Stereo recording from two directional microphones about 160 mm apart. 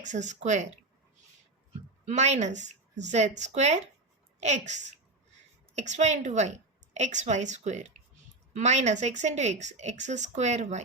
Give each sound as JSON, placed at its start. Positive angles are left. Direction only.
{"t": 0.0, "sound": "a woman's voice", "side_deg": -50}
{"t": 2.0, "sound": "a woman's voice", "side_deg": -45}